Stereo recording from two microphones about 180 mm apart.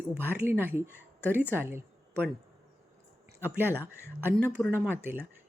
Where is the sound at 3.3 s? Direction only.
10° right (ahead or behind).